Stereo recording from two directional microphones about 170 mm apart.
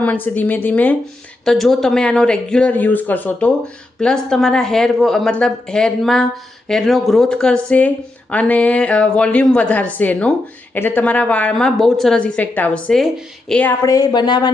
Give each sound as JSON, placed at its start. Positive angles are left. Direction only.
{"t": 0.0, "sound": "speech", "side_deg": 10}
{"t": 13.8, "sound": "speech", "side_deg": 20}